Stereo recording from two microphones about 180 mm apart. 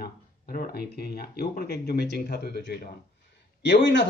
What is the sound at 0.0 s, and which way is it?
A man's voice, 55° left (ahead or behind).